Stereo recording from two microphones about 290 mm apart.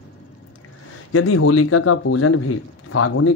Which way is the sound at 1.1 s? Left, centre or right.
Left.